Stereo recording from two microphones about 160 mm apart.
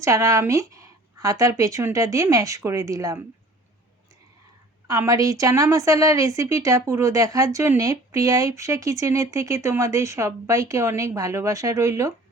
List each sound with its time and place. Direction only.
0.0 s a woman's voice: 20° right (ahead or behind)
4.9 s a woman's voice: 20° right (ahead or behind)